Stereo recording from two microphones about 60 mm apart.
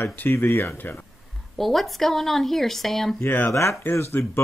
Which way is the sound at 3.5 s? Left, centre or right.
Left.